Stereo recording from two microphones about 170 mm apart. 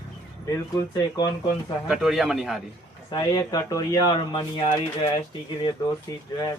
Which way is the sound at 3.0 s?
25° left (ahead or behind).